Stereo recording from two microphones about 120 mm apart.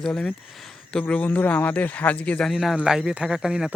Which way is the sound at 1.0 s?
15° left (ahead or behind).